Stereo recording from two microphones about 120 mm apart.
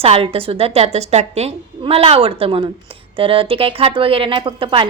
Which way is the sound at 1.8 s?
50° right (ahead or behind).